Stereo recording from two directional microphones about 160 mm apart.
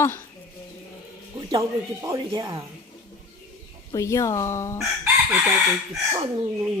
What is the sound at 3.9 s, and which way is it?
Speech, 20° left (ahead or behind).